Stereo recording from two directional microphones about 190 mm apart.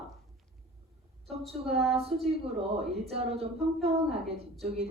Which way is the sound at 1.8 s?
Centre (ahead or behind).